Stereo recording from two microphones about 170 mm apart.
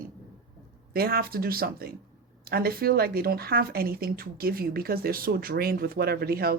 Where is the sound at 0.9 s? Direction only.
65° right (ahead or behind).